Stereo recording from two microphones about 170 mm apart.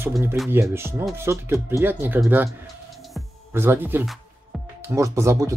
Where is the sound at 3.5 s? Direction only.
15° right (ahead or behind).